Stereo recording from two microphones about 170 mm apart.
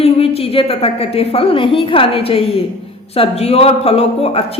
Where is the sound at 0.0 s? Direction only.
35° left (ahead or behind).